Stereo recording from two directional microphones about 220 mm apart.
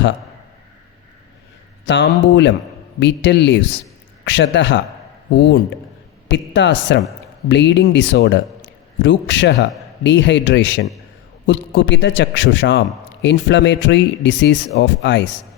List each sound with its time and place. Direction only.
1.9 s a man's voice: 55° left (ahead or behind)
6.2 s a man's voice: 55° left (ahead or behind)